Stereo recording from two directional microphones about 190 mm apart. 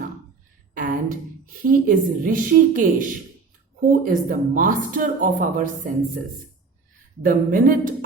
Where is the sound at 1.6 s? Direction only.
45° right (ahead or behind).